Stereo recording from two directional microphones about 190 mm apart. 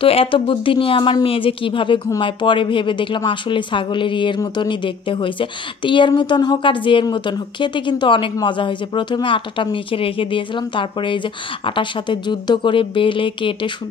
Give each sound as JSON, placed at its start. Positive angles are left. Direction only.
{"t": 0.0, "sound": "speech", "side_deg": 30}